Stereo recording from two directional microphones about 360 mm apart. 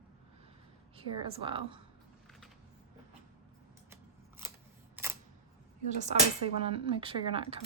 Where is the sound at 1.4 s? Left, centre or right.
Centre.